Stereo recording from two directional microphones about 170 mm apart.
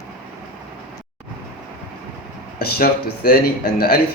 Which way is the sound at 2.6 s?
65° left (ahead or behind).